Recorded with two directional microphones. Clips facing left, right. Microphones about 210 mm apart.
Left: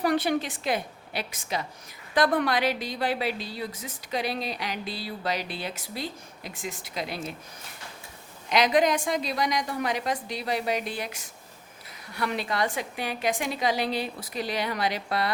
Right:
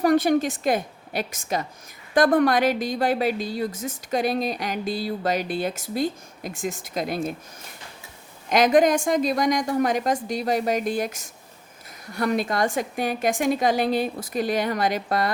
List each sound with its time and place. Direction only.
0.0 s a woman's voice: 45° right (ahead or behind)
8.4 s a woman's voice: 50° right (ahead or behind)